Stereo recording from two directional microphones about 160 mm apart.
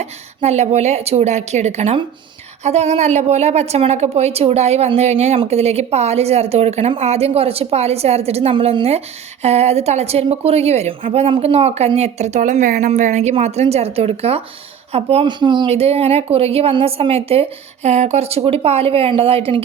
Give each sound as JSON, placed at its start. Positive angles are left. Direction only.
{"t": 0.0, "sound": "a woman's voice", "side_deg": -45}
{"t": 15.7, "sound": "a woman's voice", "side_deg": -40}